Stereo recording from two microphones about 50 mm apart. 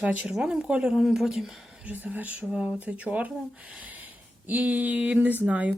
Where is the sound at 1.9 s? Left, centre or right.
Right.